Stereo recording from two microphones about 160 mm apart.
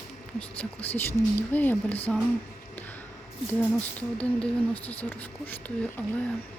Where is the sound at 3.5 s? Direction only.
10° left (ahead or behind).